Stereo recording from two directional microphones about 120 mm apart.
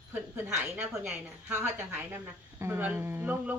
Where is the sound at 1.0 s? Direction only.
20° right (ahead or behind).